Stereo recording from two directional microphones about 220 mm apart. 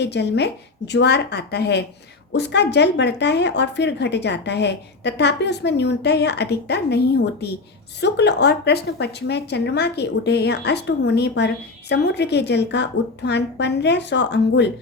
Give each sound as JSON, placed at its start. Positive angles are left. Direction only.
{"t": 0.0, "sound": "speech", "side_deg": 50}